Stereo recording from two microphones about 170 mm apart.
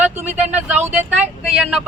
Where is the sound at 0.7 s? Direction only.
10° right (ahead or behind).